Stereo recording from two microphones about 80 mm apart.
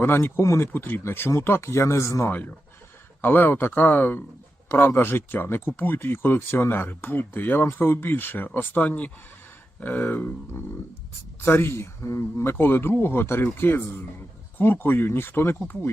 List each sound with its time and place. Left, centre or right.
0.0 s speech: left
3.2 s speech: left